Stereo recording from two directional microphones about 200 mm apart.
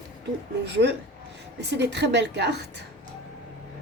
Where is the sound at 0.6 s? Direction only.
60° right (ahead or behind).